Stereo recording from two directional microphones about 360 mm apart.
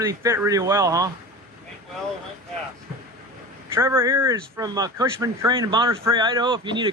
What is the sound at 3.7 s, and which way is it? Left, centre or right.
Speech, centre.